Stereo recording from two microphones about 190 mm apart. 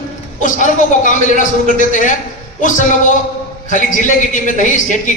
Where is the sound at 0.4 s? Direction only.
40° left (ahead or behind).